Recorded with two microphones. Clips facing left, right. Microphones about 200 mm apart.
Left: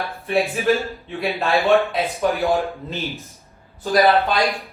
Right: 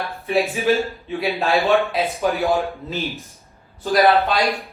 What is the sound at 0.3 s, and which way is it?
Speech, centre (ahead or behind).